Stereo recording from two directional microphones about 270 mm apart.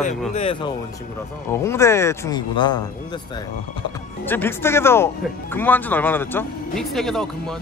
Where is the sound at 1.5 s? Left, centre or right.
Centre.